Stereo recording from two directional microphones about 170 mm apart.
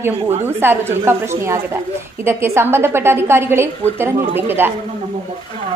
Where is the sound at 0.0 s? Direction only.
15° right (ahead or behind).